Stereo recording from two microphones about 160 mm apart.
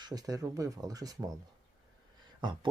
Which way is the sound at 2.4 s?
30° right (ahead or behind).